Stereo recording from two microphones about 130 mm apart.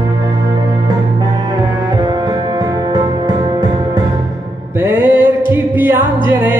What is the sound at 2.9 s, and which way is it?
Music, 30° right (ahead or behind).